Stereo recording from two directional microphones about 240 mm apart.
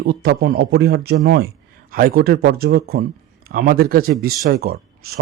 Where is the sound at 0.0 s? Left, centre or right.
Right.